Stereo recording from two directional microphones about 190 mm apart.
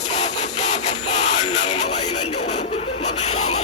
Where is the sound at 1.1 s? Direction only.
35° left (ahead or behind).